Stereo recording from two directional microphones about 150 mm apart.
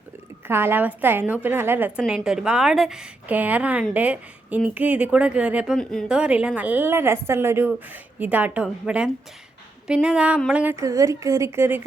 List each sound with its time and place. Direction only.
0.4 s a woman's voice: 15° right (ahead or behind)
5.7 s speech: 5° left (ahead or behind)
6.1 s a woman's voice: 5° right (ahead or behind)
10.8 s a woman's voice: 20° right (ahead or behind)